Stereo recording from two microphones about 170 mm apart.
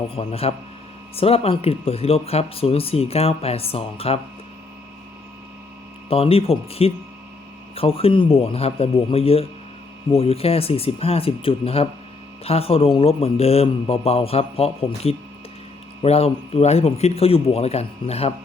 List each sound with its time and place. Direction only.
0.2 s speech: 35° left (ahead or behind)
6.1 s speech: 35° left (ahead or behind)